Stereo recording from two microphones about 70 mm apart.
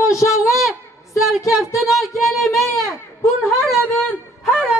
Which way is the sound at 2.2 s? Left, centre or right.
Centre.